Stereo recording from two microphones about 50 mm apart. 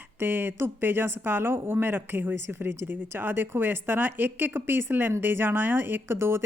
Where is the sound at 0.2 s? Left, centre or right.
Right.